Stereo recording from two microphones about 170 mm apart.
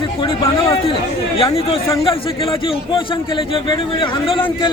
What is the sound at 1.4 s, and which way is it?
A man's voice, 35° left (ahead or behind).